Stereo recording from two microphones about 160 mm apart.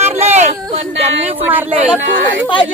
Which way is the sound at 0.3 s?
45° right (ahead or behind).